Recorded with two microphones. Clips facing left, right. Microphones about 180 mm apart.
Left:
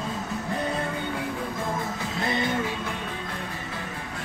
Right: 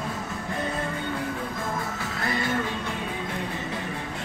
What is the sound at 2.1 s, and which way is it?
Music, 20° left (ahead or behind).